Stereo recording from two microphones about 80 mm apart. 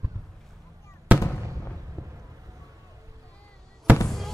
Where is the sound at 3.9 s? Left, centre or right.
Right.